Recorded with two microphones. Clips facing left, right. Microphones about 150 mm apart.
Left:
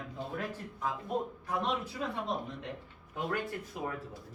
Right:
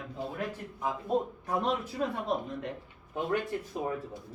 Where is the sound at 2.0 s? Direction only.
45° right (ahead or behind).